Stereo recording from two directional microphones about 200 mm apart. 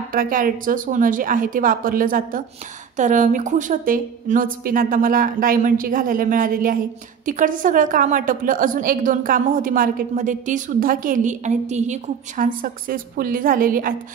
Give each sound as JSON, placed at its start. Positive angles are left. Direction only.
{"t": 0.1, "sound": "a woman's voice", "side_deg": -45}